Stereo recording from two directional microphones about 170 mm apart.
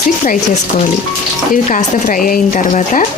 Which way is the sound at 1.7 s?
50° left (ahead or behind).